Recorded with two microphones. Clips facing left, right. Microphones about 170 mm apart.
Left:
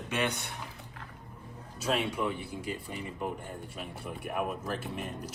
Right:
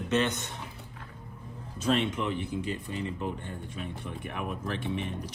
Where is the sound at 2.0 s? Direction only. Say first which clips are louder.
Right 2 dB; 10° left (ahead or behind).